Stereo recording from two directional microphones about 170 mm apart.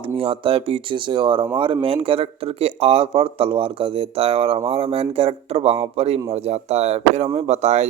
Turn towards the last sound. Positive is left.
turn(degrees=-40)  # may be behind; listen again after turning